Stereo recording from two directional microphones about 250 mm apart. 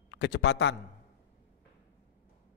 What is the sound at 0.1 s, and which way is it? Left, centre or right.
Speech, left.